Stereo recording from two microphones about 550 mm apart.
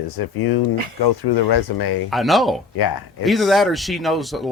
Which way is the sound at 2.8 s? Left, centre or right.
Left.